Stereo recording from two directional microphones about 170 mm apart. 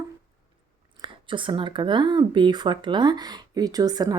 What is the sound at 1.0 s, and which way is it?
Speech, 30° right (ahead or behind).